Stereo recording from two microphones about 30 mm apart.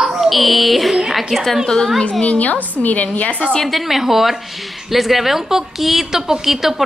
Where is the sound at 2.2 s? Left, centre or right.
Left.